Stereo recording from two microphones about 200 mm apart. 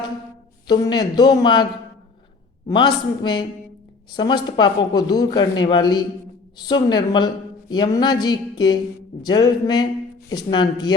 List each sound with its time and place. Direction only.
0.7 s a woman's voice: 20° left (ahead or behind)
2.6 s a woman's voice: 20° left (ahead or behind)